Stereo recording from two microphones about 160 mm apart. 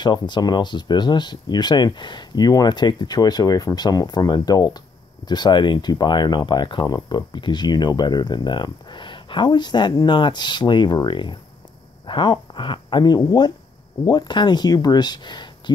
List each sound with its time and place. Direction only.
0.0 s speech: 25° left (ahead or behind)